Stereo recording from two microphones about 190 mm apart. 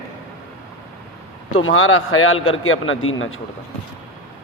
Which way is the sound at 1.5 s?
90° left.